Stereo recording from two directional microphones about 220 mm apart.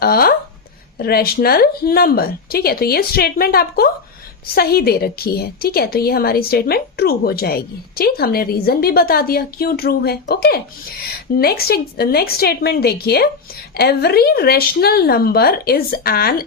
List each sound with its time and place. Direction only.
0.0 s a woman's voice: 45° left (ahead or behind)